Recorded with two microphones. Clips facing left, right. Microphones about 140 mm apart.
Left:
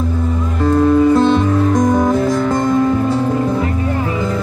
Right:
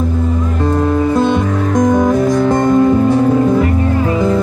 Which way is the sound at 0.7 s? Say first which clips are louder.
Left 4 dB; 15° right (ahead or behind).